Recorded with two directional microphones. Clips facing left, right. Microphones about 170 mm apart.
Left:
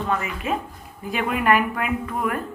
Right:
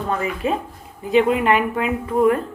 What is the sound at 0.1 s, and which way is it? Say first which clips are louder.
Speech: right 5 dB; 30° right (ahead or behind).